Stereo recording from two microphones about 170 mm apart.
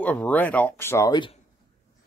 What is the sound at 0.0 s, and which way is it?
Speech, 10° left (ahead or behind).